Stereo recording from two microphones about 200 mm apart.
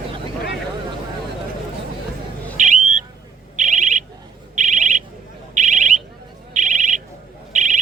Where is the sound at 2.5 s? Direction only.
40° right (ahead or behind).